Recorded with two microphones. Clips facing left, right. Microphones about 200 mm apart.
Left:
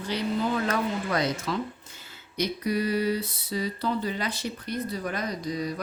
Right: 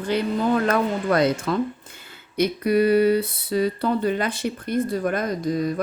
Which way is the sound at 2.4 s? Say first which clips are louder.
Right 8 dB; 60° right (ahead or behind).